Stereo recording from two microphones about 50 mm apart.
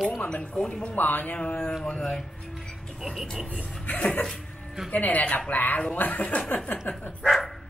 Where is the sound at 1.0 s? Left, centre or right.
Left.